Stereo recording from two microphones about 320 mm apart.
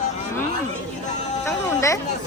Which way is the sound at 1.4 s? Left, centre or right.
Centre.